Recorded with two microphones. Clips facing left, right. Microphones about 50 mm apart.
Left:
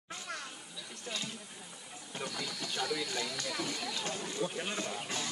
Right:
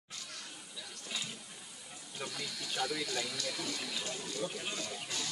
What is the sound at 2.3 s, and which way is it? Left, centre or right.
Speech, centre.